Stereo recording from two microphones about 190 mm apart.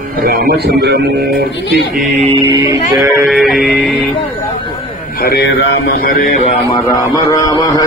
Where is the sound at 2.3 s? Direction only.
20° right (ahead or behind).